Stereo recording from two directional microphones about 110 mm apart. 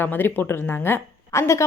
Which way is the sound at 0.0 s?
20° left (ahead or behind).